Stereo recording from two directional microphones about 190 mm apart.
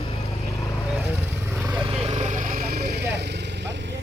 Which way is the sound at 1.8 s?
30° right (ahead or behind).